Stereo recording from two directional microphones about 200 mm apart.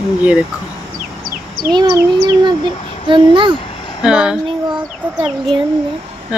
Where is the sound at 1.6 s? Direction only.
50° right (ahead or behind).